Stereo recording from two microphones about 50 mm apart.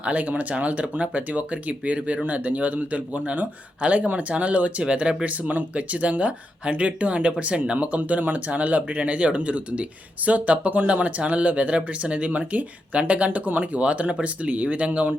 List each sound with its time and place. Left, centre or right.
0.0 s speech: right